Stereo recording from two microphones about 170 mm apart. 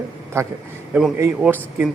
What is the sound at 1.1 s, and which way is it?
Speech, 15° right (ahead or behind).